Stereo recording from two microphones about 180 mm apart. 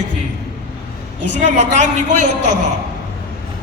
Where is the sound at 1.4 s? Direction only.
40° right (ahead or behind).